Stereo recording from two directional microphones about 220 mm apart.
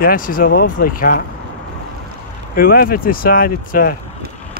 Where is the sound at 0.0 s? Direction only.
40° left (ahead or behind).